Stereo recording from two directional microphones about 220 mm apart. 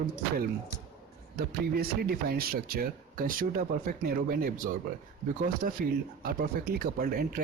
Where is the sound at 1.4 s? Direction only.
45° right (ahead or behind).